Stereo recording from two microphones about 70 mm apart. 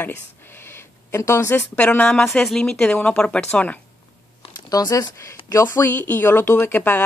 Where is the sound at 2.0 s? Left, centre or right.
Centre.